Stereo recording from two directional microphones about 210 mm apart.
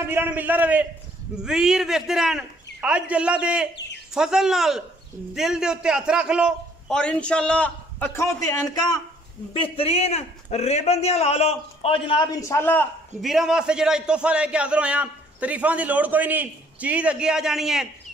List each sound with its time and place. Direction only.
0.0 s a man's voice: 10° right (ahead or behind); by 12.8 s 10° left (ahead or behind)
13.2 s a man's voice: centre (ahead or behind)